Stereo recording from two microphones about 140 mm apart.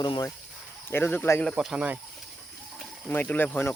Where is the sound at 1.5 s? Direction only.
5° right (ahead or behind).